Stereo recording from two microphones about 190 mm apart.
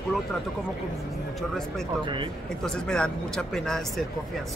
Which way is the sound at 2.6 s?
5° left (ahead or behind).